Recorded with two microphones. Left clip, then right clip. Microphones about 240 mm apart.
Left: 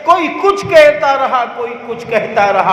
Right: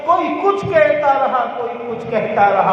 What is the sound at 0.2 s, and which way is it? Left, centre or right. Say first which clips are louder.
Speech: left 3 dB; left.